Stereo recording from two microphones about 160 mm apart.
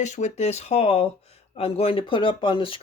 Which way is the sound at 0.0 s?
50° left (ahead or behind).